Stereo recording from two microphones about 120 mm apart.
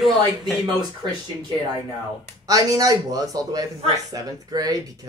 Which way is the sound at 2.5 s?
30° right (ahead or behind).